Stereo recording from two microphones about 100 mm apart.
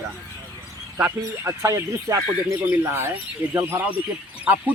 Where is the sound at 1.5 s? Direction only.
30° right (ahead or behind).